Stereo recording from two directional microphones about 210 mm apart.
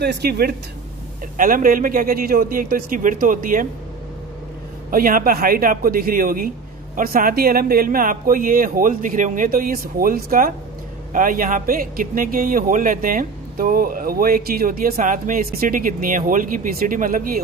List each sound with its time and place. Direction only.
0.0 s a man's voice: 50° right (ahead or behind)
4.9 s a man's voice: 40° right (ahead or behind)